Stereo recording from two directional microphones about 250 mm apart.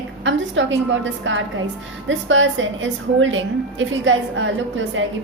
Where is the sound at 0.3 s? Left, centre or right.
Right.